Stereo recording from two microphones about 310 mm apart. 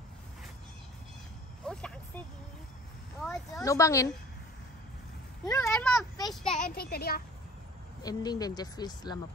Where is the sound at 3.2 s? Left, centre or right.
Centre.